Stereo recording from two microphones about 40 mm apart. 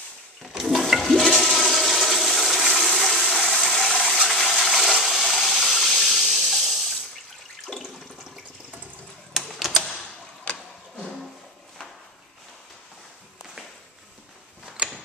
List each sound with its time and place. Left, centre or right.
0.5 s toilet flush: centre
4.1 s a sound: centre
4.6 s toilet flush: centre
5.3 s water: centre
9.3 s typewriter: centre
10.5 s a sound: left
14.8 s mechanisms: right